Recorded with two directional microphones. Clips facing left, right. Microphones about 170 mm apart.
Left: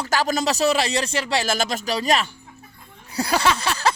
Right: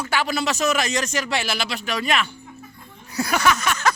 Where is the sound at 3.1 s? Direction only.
30° left (ahead or behind).